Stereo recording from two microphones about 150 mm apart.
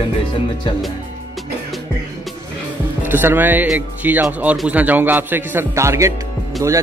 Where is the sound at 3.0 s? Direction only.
15° right (ahead or behind).